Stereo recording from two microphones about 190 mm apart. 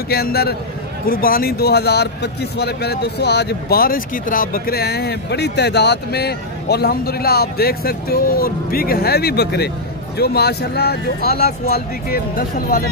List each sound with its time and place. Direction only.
0.1 s a man's voice: 55° left (ahead or behind)